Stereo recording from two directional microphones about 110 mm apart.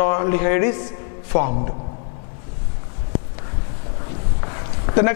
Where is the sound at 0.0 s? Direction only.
10° left (ahead or behind).